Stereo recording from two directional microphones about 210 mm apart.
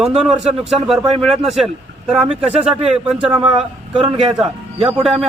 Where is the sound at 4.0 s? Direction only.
25° right (ahead or behind).